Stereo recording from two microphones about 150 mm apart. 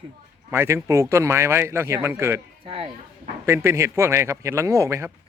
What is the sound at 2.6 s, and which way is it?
Speech, 40° right (ahead or behind).